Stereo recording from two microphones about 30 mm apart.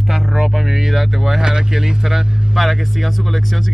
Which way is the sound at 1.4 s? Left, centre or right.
Right.